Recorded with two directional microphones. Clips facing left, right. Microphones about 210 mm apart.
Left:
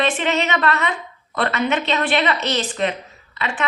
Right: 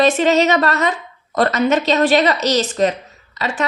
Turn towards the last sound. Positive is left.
turn(degrees=-40)  # may be behind; listen again after turning